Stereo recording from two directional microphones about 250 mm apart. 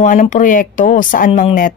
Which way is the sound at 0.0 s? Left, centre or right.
Left.